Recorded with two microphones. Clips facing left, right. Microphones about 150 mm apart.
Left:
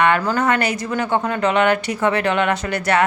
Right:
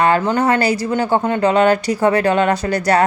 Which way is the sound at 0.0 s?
35° right (ahead or behind).